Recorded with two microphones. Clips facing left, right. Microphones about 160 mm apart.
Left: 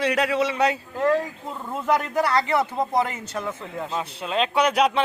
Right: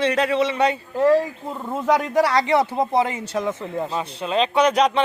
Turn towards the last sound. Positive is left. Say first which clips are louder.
# right 3 dB
turn(degrees=5)  # may be behind; listen again after turning